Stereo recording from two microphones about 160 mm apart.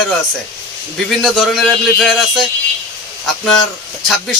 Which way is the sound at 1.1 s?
Centre (ahead or behind).